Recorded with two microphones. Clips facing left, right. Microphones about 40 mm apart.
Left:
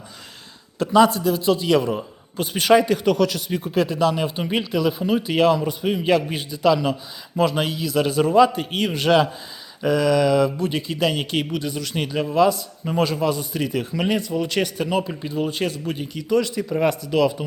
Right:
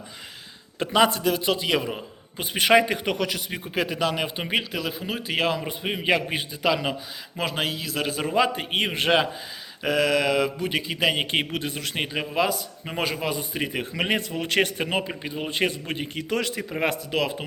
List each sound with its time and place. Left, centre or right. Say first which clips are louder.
0.8 s a man's voice: left 5 dB; right
2.4 s a man's voice: left 2 dB; centre
3.8 s a man's voice: left 5 dB; right
4.8 s a man's voice: left 9 dB; centre
5.6 s a man's voice: left 4 dB; right
7.3 s a man's voice: left 6 dB; centre
8.4 s a man's voice: left 4 dB; right
15.4 s a man's voice: left 1 dB; right